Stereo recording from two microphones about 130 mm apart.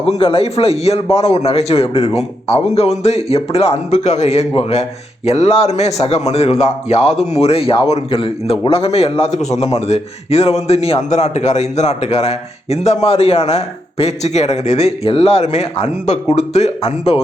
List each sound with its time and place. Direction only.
0.0 s a man's voice: 45° left (ahead or behind)